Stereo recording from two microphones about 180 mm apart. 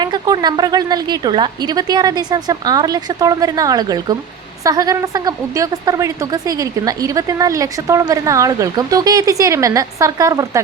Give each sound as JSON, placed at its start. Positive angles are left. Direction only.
{"t": 0.0, "sound": "a woman's voice", "side_deg": -25}